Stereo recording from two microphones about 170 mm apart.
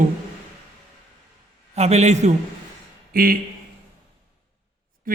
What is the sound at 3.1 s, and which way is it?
Speech, 60° right (ahead or behind).